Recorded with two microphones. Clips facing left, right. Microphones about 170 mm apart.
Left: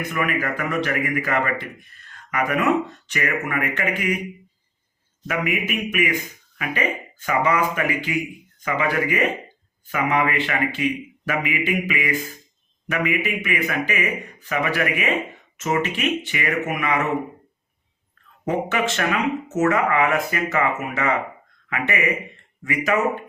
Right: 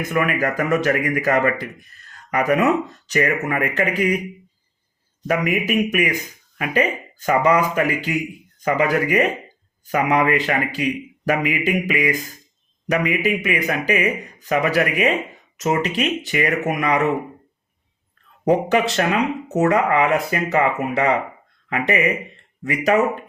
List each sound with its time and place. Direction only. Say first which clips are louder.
0.1 s speech: right 5 dB; 40° right (ahead or behind)
5.2 s speech: right 4 dB; 40° right (ahead or behind)
18.4 s speech: right 5 dB; 35° right (ahead or behind)